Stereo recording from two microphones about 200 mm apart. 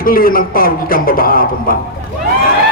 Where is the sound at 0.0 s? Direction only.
45° left (ahead or behind).